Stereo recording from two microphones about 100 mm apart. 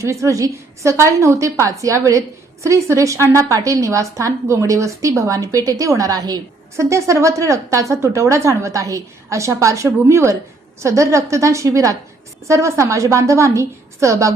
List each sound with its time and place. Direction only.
0.0 s a woman's voice: 30° right (ahead or behind)
6.7 s a woman's voice: 30° right (ahead or behind)